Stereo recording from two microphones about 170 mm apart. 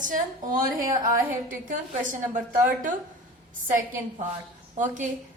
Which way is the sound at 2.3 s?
50° right (ahead or behind).